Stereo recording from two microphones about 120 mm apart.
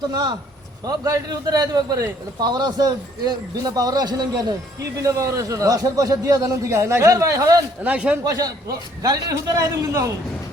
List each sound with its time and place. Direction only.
0.1 s a man's voice: 40° right (ahead or behind)
7.9 s a man's voice: 10° right (ahead or behind)
8.2 s a man's voice: 30° right (ahead or behind)